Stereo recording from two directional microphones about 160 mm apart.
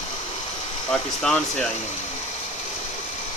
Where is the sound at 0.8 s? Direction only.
5° left (ahead or behind).